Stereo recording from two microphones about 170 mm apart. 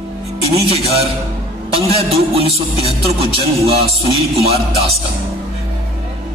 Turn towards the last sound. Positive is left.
turn(degrees=-35)  # may be behind; listen again after turning